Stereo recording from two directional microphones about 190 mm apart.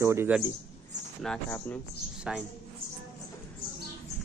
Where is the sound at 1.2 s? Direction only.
5° left (ahead or behind).